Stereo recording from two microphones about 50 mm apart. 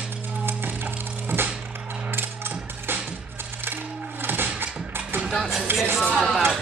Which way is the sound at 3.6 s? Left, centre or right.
Right.